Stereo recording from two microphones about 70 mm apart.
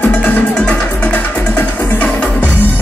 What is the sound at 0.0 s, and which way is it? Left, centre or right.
Music, left.